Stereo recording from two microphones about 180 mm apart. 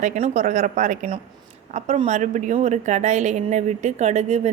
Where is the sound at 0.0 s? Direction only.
40° right (ahead or behind).